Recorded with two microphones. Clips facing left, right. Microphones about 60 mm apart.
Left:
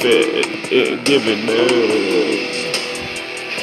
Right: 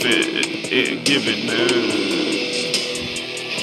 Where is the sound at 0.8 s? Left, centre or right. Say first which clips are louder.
Left 5 dB; left.